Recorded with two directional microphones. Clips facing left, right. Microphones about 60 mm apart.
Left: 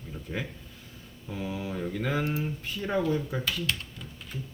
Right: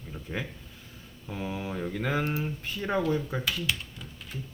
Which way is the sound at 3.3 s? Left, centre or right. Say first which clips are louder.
Even; centre.